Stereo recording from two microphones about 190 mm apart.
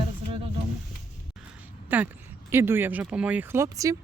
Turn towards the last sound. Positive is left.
turn(degrees=-15)  # may be behind; listen again after turning